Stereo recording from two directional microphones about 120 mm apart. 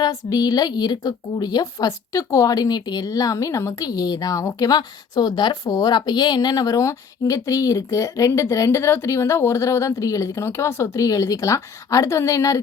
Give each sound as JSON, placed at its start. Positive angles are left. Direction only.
{"t": 0.0, "sound": "a woman's voice", "side_deg": 30}